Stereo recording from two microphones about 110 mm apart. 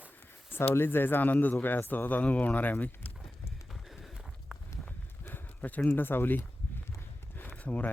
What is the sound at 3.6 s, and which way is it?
Run, centre (ahead or behind).